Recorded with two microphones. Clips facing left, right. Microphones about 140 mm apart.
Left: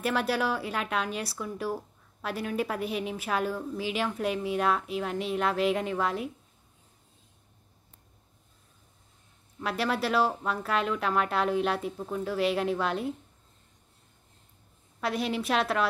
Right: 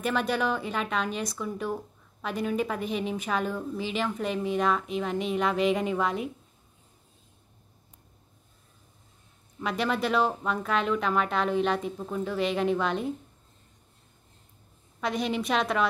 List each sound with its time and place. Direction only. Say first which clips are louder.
0.0 s a woman's voice: right 1 dB; 5° left (ahead or behind)
9.6 s a woman's voice: right 1 dB; 5° left (ahead or behind)
15.0 s a woman's voice: right 1 dB; 5° left (ahead or behind)